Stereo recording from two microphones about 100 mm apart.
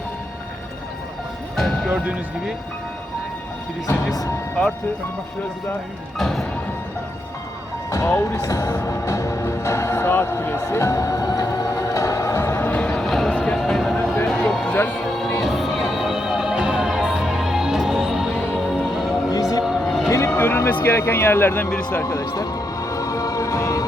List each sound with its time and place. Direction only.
1.5 s speech: 5° left (ahead or behind)
1.9 s speech: 15° right (ahead or behind)
6.1 s music: 5° left (ahead or behind)
7.9 s speech: 30° left (ahead or behind)
8.4 s music: 35° left (ahead or behind)
12.8 s music: 5° left (ahead or behind)
14.3 s a sound: 5° left (ahead or behind)
14.7 s music: 15° left (ahead or behind)
15.4 s music: centre (ahead or behind)
19.3 s music: 40° left (ahead or behind)
19.8 s music: centre (ahead or behind)
20.1 s a sound: 30° left (ahead or behind)
20.8 s speech: 25° left (ahead or behind)
22.0 s music: 35° left (ahead or behind)